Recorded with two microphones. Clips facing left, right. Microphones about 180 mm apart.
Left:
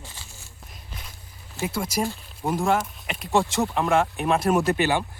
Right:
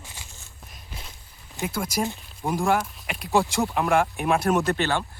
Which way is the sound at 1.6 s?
Centre (ahead or behind).